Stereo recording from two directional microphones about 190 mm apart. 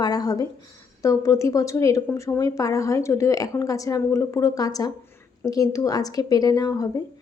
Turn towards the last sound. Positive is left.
turn(degrees=15)  # may be behind; listen again after turning